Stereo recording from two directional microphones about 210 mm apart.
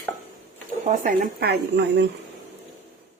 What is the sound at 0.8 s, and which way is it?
Speech, 45° right (ahead or behind).